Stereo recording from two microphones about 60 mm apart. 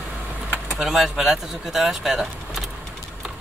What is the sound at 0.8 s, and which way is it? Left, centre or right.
Speech, centre.